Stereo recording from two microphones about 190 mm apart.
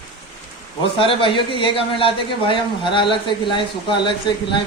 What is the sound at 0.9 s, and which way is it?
Speech, 25° left (ahead or behind).